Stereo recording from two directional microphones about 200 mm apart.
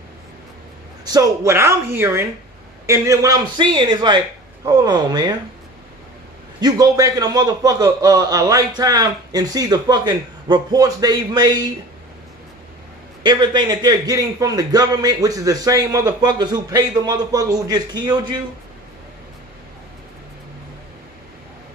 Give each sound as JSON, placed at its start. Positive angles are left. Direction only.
{"t": 1.0, "sound": "a man's voice", "side_deg": -20}
{"t": 6.6, "sound": "a man's voice", "side_deg": -15}
{"t": 13.2, "sound": "a man's voice", "side_deg": -20}